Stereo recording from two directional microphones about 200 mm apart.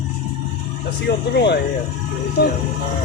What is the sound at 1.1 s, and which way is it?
Speech, 55° left (ahead or behind).